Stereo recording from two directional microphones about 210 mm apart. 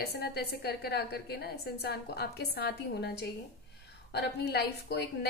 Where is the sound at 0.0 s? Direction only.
50° left (ahead or behind).